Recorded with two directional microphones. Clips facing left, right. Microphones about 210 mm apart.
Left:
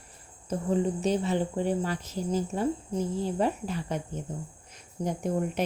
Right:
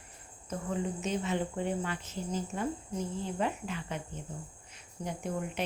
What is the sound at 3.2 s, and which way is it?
Speech, 35° left (ahead or behind).